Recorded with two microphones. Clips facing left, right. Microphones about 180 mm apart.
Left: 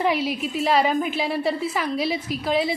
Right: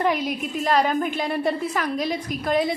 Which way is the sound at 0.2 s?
45° right (ahead or behind).